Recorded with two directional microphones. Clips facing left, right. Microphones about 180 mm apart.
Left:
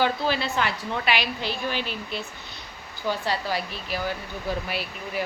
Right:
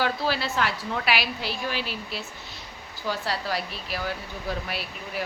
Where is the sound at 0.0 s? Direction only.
Centre (ahead or behind).